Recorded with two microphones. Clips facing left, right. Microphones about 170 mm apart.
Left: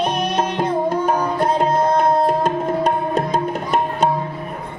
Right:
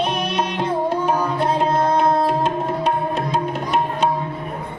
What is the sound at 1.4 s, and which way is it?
Tabla, 40° left (ahead or behind).